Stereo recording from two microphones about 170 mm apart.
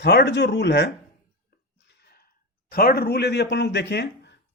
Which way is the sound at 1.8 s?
70° left (ahead or behind).